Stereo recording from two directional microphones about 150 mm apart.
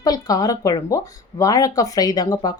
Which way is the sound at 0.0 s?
25° left (ahead or behind).